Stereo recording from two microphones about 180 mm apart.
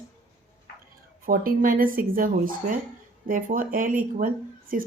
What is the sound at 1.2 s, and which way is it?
Speech, 50° right (ahead or behind).